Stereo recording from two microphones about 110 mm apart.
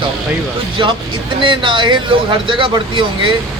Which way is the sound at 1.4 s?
50° right (ahead or behind).